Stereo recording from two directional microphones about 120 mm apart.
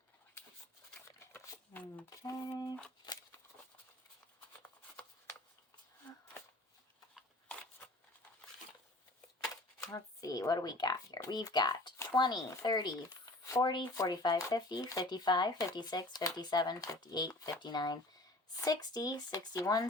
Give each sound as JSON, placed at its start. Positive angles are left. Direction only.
{"t": 1.3, "sound": "a sound", "side_deg": 15}
{"t": 2.0, "sound": "music", "side_deg": 30}
{"t": 4.6, "sound": "shuffling cards", "side_deg": 15}
{"t": 9.8, "sound": "speech", "side_deg": 30}